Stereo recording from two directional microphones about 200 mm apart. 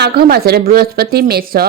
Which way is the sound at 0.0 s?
50° right (ahead or behind).